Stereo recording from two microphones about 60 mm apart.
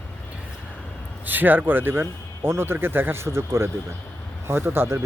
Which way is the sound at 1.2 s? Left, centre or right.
Right.